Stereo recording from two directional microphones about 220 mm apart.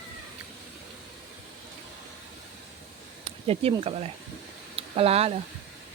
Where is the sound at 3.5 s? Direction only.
25° right (ahead or behind).